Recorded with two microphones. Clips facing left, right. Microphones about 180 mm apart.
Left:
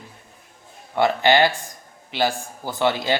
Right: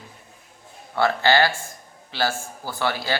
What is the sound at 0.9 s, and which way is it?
A man's voice, 20° left (ahead or behind).